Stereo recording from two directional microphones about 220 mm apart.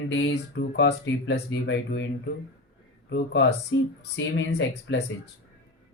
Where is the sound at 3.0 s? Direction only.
50° left (ahead or behind).